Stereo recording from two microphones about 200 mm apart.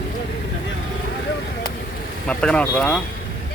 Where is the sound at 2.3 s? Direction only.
5° left (ahead or behind).